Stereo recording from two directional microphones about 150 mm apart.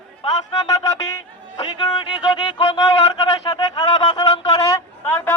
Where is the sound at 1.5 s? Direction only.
35° left (ahead or behind).